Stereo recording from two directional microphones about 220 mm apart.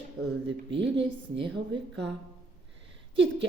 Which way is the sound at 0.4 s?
55° right (ahead or behind).